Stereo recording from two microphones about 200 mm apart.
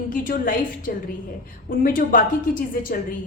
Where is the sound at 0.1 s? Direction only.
45° left (ahead or behind).